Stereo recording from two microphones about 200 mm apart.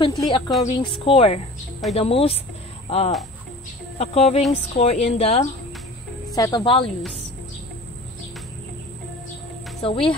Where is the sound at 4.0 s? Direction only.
30° left (ahead or behind).